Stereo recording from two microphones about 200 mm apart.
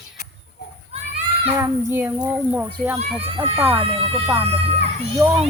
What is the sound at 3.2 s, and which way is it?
A child's voice, 30° right (ahead or behind).